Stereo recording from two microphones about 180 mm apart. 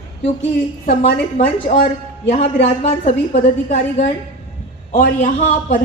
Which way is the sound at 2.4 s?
35° left (ahead or behind).